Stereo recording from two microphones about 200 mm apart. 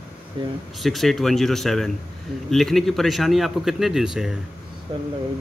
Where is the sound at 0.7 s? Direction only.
Centre (ahead or behind).